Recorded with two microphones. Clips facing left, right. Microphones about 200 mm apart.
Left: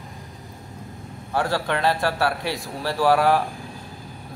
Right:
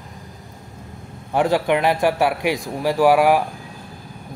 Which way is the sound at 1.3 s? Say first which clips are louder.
Right 6 dB; 20° right (ahead or behind).